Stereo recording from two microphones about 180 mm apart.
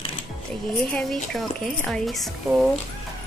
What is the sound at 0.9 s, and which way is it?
Speech, 5° left (ahead or behind).